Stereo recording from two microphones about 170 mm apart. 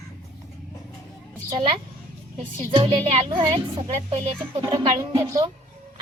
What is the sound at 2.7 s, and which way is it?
Speech, 35° right (ahead or behind).